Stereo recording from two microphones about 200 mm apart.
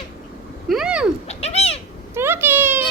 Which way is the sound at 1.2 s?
30° left (ahead or behind).